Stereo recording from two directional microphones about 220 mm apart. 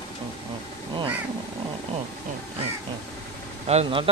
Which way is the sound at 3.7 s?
25° right (ahead or behind).